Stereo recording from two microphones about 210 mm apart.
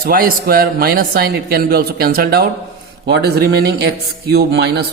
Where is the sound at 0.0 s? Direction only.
45° right (ahead or behind).